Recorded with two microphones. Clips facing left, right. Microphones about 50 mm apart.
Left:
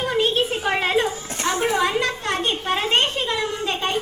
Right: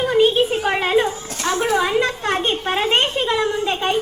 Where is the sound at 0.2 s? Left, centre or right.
Centre.